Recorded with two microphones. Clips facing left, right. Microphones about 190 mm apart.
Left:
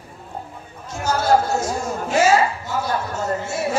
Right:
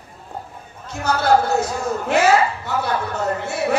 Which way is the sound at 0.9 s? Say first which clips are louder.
Right 1 dB; 60° right (ahead or behind).